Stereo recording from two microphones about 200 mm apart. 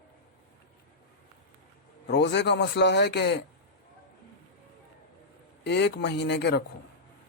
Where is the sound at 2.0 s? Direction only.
60° left (ahead or behind).